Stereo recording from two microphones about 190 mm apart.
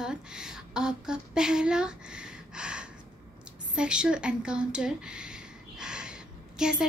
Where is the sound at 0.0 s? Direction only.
5° right (ahead or behind).